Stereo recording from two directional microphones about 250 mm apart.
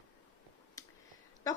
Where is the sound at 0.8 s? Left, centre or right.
Centre.